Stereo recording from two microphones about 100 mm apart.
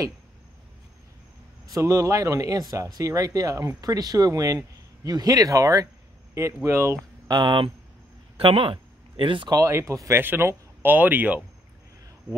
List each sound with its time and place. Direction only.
1.7 s speech: 30° right (ahead or behind)
7.2 s speech: 45° right (ahead or behind)
9.5 s speech: 30° right (ahead or behind); by 11.4 s 15° right (ahead or behind)